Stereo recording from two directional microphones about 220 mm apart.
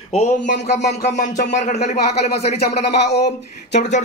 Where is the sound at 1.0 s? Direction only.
35° left (ahead or behind).